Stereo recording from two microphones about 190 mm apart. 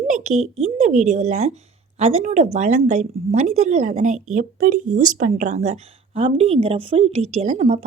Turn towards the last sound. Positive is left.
turn(degrees=-35)  # may be behind; listen again after turning